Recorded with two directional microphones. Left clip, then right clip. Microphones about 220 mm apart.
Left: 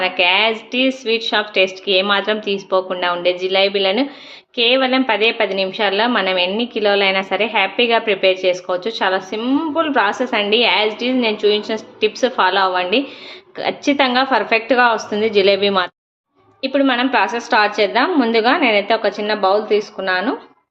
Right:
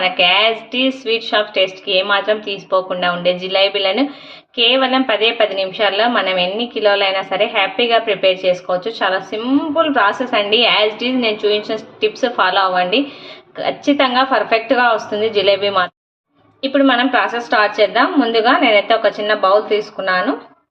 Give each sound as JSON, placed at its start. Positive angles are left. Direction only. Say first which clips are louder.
{"t": 0.0, "sound": "a woman's voice", "louder": "right 2 dB", "side_deg": 15}